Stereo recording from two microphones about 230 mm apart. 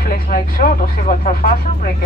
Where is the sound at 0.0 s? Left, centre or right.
Left.